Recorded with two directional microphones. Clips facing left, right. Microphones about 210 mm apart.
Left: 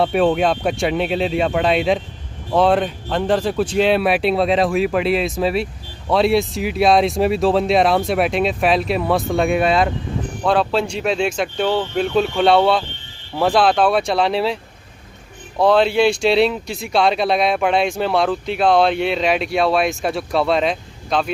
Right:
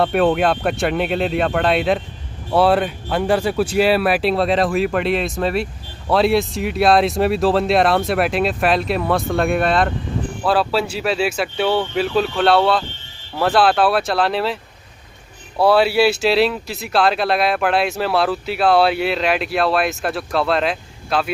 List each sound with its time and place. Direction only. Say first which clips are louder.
0.0 s speech: even; centre (ahead or behind)